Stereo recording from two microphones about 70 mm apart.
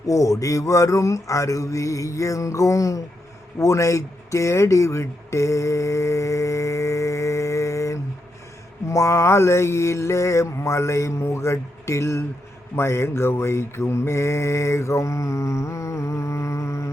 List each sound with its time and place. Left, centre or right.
0.1 s mantra: left
3.6 s speech: left
8.9 s mantra: left